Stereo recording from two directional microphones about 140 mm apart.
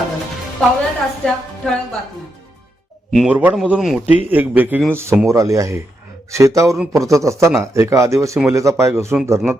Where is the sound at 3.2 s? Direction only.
10° right (ahead or behind).